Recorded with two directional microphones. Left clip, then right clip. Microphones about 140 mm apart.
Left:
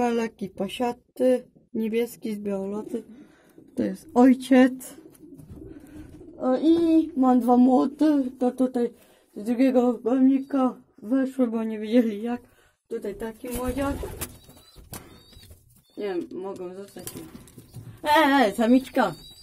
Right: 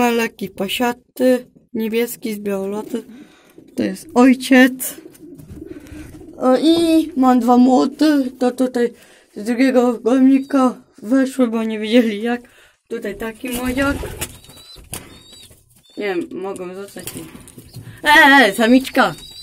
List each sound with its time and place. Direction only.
0.0 s speech: 5° left (ahead or behind)
6.3 s speech: 5° right (ahead or behind); by 9.9 s 20° left (ahead or behind)
10.0 s speech: 5° right (ahead or behind)
11.5 s speech: 10° left (ahead or behind)
12.9 s speech: 5° right (ahead or behind)
16.0 s speech: centre (ahead or behind)
18.0 s speech: 15° left (ahead or behind)